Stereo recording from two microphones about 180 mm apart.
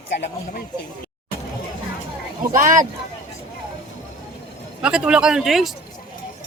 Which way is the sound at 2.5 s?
50° right (ahead or behind).